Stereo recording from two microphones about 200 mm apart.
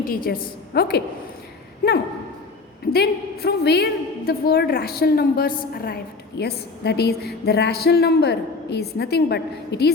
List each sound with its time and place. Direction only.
0.0 s a woman's voice: 45° left (ahead or behind)